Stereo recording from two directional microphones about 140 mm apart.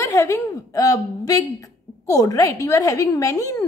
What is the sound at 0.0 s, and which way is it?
A woman's voice, 25° left (ahead or behind).